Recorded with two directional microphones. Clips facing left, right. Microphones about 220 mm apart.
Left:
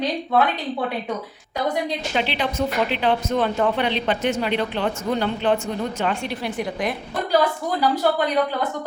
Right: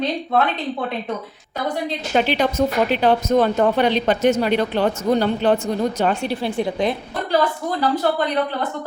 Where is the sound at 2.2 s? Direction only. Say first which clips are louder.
Right 6 dB; 45° right (ahead or behind); by 6.9 s 25° right (ahead or behind).